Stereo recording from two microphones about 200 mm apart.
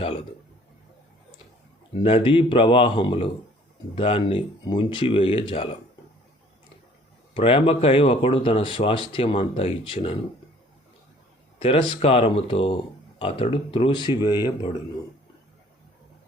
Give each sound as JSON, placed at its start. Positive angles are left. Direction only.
{"t": 2.0, "sound": "speech", "side_deg": 25}
{"t": 7.3, "sound": "speech", "side_deg": 25}
{"t": 11.6, "sound": "speech", "side_deg": 25}